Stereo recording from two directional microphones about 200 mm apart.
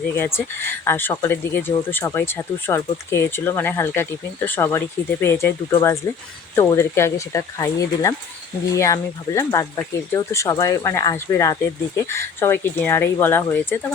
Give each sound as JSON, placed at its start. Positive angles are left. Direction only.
{"t": 0.2, "sound": "speech", "side_deg": 10}